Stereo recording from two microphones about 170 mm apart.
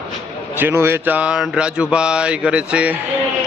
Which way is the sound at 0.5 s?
15° right (ahead or behind).